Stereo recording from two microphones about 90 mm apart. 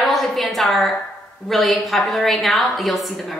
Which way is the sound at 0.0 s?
Centre (ahead or behind).